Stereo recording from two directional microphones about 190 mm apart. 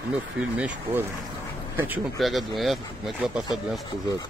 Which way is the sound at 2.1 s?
Centre (ahead or behind).